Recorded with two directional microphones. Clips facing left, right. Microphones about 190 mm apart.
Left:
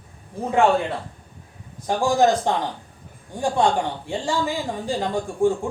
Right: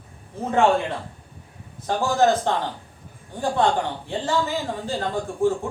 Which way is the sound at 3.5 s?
15° left (ahead or behind).